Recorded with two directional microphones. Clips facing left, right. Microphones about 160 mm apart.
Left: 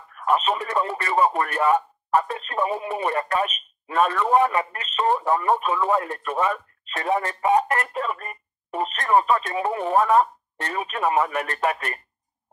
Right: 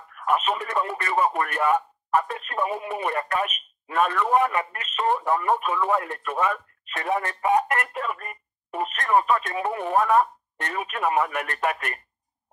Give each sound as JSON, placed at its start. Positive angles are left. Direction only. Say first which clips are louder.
{"t": 0.1, "sound": "speech", "louder": "left 2 dB", "side_deg": 30}